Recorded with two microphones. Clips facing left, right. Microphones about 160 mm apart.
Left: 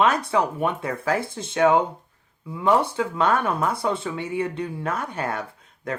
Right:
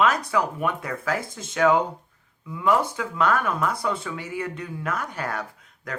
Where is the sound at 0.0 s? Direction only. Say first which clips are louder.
Left 2 dB; 30° left (ahead or behind).